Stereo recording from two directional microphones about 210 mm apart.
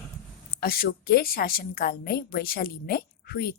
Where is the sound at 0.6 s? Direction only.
45° left (ahead or behind).